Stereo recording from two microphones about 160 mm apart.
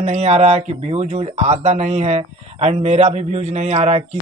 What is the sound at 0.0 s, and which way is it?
A man's voice, 40° right (ahead or behind).